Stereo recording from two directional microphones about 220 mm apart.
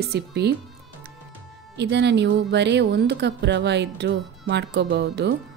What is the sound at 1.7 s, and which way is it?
Speech, 50° right (ahead or behind).